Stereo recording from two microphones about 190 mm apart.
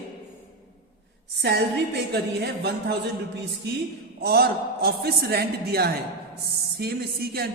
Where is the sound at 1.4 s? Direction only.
55° right (ahead or behind).